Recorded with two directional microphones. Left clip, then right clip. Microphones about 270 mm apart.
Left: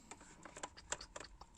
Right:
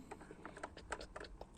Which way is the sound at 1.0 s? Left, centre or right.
Left.